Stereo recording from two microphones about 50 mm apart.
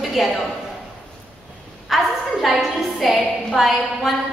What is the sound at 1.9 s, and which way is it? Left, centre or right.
A woman's voice, centre.